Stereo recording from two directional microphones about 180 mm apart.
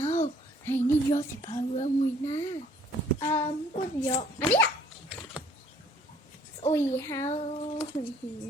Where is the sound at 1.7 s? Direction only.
40° left (ahead or behind).